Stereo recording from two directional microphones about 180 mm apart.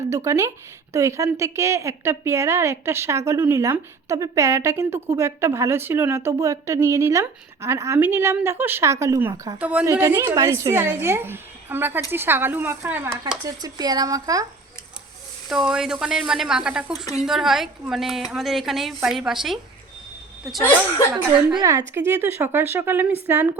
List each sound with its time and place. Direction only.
0.1 s a woman's voice: 15° right (ahead or behind)
9.6 s a woman's voice: 10° right (ahead or behind)
13.4 s speech: 20° right (ahead or behind)
15.4 s a woman's voice: centre (ahead or behind)
21.6 s a woman's voice: 15° right (ahead or behind)